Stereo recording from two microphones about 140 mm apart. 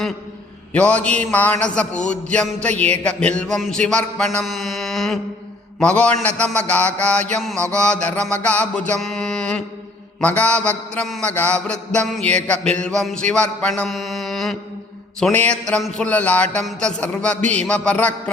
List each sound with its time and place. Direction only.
0.7 s a man's voice: 10° left (ahead or behind)
12.8 s mantra: 5° left (ahead or behind)
15.2 s a man's voice: 10° left (ahead or behind)